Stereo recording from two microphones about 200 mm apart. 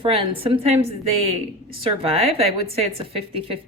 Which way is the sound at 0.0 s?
25° right (ahead or behind).